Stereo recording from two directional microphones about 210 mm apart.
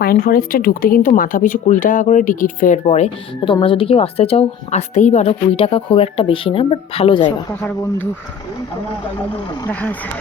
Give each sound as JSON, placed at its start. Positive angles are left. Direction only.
{"t": 0.0, "sound": "speech", "side_deg": 45}
{"t": 7.6, "sound": "speech", "side_deg": 15}
{"t": 9.6, "sound": "speech", "side_deg": 10}